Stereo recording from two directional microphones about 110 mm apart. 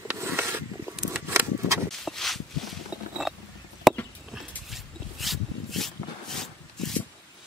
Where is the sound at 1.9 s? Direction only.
Centre (ahead or behind).